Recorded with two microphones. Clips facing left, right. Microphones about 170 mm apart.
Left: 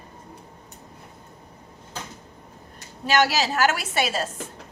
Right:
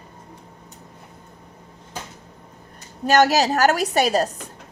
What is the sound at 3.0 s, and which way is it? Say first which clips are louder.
A woman's voice: right 5 dB; 45° right (ahead or behind).